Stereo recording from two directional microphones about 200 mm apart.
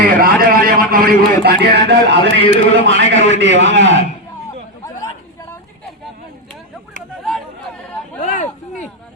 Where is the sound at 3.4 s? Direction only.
65° right (ahead or behind).